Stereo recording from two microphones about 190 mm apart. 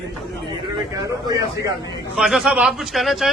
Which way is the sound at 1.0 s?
20° right (ahead or behind).